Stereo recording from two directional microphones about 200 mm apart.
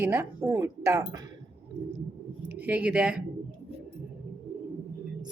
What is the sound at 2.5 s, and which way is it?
Speech, 10° right (ahead or behind).